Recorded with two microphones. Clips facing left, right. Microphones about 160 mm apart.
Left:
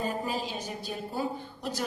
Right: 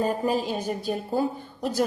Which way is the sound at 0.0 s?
45° right (ahead or behind).